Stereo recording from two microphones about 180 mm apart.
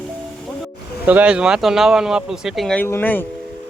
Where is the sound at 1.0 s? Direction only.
5° right (ahead or behind); by 3.2 s 10° left (ahead or behind).